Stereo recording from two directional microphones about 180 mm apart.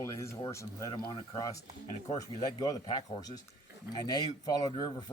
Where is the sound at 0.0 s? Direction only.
15° left (ahead or behind).